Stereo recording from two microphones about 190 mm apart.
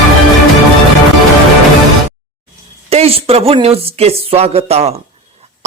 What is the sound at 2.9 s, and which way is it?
Speech, 30° right (ahead or behind).